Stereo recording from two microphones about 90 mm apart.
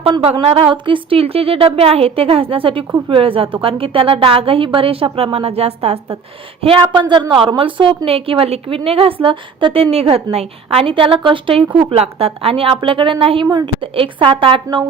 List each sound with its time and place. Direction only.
0.2 s a woman's voice: 90° right
6.6 s a woman's voice: 75° right (ahead or behind)
9.2 s a woman's voice: 65° right (ahead or behind)